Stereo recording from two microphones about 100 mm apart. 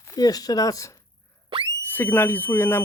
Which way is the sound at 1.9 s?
20° left (ahead or behind).